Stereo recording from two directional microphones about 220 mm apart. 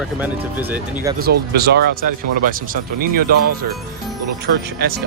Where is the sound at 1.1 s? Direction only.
45° right (ahead or behind).